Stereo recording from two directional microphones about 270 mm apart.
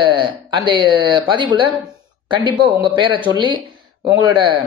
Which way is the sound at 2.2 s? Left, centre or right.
Centre.